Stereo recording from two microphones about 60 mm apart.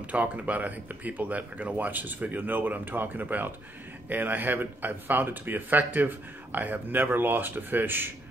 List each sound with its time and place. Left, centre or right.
0.1 s speech: right